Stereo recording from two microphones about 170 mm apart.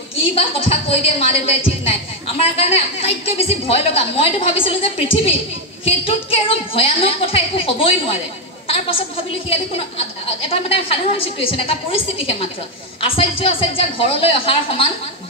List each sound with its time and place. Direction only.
0.2 s a woman's voice: 35° left (ahead or behind)
6.7 s a woman's voice: 35° left (ahead or behind)